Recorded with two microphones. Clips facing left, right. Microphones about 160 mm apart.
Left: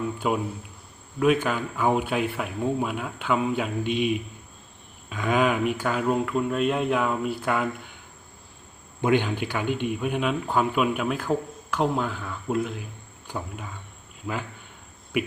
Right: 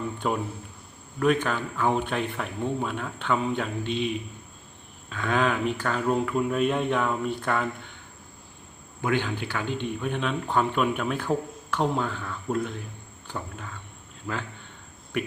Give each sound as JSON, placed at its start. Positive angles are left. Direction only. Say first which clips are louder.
{"t": 0.2, "sound": "a man's voice", "louder": "left 1 dB", "side_deg": 5}
{"t": 9.0, "sound": "speech", "louder": "left 4 dB", "side_deg": 20}
{"t": 15.1, "sound": "a man's voice", "louder": "left 3 dB", "side_deg": 10}